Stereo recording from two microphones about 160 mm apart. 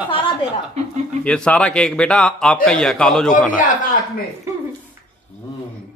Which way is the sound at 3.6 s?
55° left (ahead or behind).